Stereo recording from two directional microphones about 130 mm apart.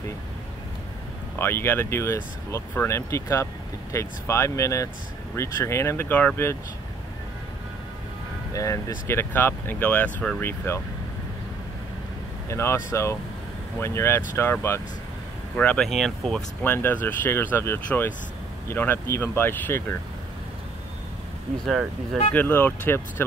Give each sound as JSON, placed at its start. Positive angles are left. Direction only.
{"t": 1.4, "sound": "speech", "side_deg": 20}
{"t": 8.5, "sound": "speech", "side_deg": 25}
{"t": 12.4, "sound": "speech", "side_deg": 20}
{"t": 16.6, "sound": "speech", "side_deg": 15}
{"t": 21.6, "sound": "speech", "side_deg": 0}
{"t": 22.3, "sound": "speech", "side_deg": 15}